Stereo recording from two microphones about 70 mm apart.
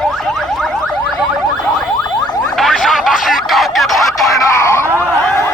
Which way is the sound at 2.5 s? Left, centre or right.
Centre.